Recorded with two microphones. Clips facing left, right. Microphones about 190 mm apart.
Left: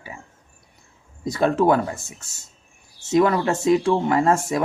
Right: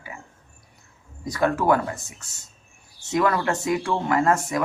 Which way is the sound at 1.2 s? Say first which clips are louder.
Left 3 dB; 25° left (ahead or behind).